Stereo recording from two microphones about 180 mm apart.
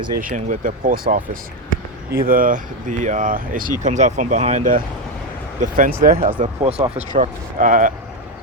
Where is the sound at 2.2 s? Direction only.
50° right (ahead or behind).